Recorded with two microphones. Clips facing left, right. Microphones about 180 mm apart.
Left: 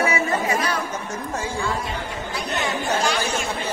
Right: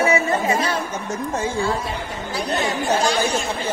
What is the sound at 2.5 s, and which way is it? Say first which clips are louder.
Speech: right 3 dB; 35° right (ahead or behind).